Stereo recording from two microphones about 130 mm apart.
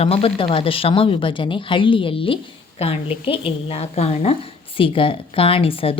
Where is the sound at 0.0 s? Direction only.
50° left (ahead or behind).